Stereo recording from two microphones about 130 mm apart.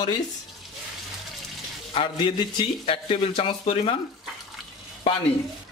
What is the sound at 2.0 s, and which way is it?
Speech, 40° left (ahead or behind).